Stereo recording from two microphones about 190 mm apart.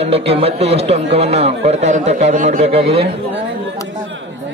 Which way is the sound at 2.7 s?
30° right (ahead or behind).